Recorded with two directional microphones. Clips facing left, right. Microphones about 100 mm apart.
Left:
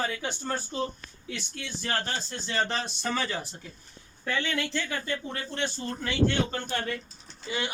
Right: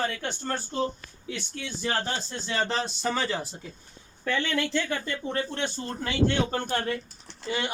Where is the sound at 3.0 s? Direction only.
20° right (ahead or behind).